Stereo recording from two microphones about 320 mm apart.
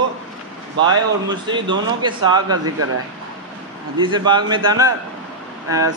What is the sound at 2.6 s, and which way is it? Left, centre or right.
Speech, right.